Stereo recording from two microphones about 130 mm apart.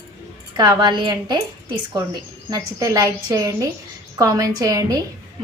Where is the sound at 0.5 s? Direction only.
30° right (ahead or behind).